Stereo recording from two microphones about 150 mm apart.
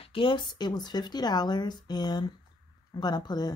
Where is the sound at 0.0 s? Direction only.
35° left (ahead or behind).